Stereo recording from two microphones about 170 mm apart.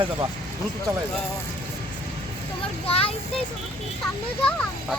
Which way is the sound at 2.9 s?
35° left (ahead or behind).